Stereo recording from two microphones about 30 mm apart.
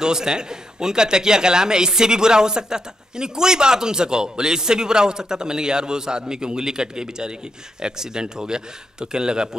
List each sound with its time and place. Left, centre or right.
0.0 s a man's voice: right